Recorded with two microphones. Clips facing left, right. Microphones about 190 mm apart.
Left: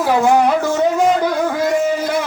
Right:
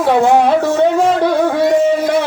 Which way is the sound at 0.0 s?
25° right (ahead or behind).